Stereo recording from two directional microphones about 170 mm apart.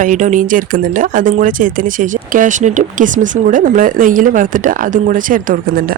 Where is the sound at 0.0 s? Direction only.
45° right (ahead or behind).